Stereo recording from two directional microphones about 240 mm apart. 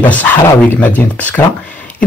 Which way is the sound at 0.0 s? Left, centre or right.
Centre.